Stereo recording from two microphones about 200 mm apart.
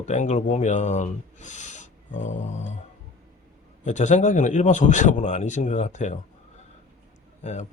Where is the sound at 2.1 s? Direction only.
65° left (ahead or behind).